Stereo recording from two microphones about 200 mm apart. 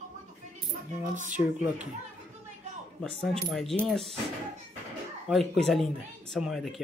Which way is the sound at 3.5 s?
Centre (ahead or behind).